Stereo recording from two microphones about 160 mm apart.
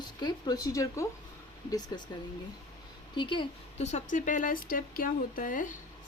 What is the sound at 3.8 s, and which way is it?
A woman's voice, 45° left (ahead or behind).